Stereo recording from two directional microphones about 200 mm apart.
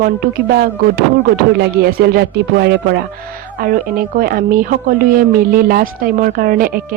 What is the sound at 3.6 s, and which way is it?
A woman's voice, 45° right (ahead or behind).